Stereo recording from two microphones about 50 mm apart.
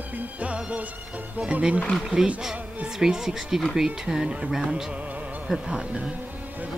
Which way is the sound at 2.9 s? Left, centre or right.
Centre.